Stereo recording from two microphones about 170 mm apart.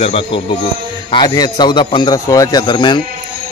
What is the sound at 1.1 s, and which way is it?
A man's voice, 25° left (ahead or behind).